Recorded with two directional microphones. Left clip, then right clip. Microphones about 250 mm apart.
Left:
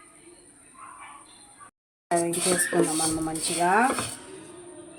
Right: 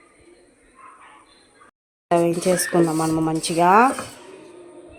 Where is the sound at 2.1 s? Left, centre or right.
Right.